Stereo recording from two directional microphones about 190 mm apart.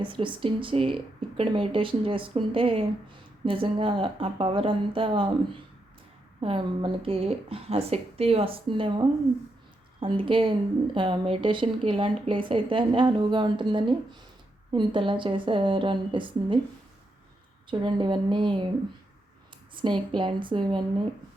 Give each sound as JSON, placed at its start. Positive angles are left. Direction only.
{"t": 0.0, "sound": "speech", "side_deg": -25}
{"t": 6.4, "sound": "speech", "side_deg": -25}
{"t": 17.7, "sound": "speech", "side_deg": -25}
{"t": 19.7, "sound": "speech", "side_deg": -25}